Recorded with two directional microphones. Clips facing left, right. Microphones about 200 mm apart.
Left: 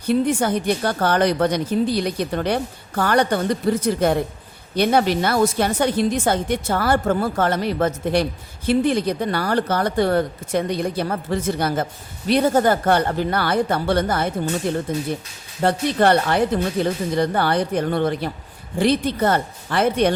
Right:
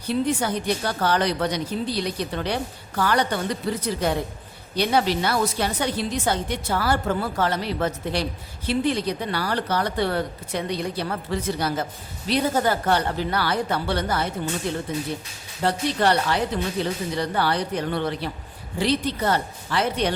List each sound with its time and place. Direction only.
0.1 s a woman's voice: 50° left (ahead or behind)
15.6 s a woman's voice: 50° left (ahead or behind)